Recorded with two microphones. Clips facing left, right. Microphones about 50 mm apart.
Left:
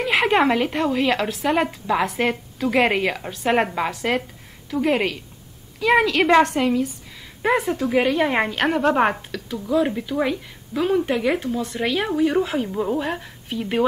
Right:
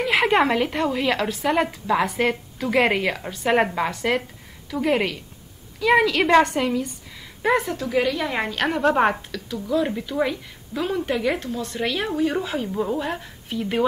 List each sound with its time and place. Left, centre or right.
0.0 s speech: centre
7.9 s a woman's voice: left
8.5 s speech: centre